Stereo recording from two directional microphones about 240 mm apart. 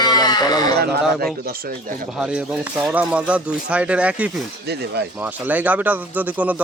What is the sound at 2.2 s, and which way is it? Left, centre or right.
Speech, centre.